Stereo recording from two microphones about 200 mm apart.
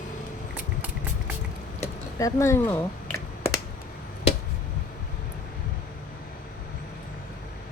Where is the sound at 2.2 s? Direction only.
15° left (ahead or behind).